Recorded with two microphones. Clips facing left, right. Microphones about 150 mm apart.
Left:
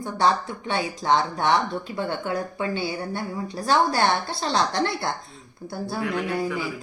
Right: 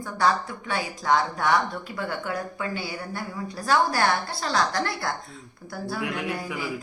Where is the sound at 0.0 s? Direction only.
25° left (ahead or behind).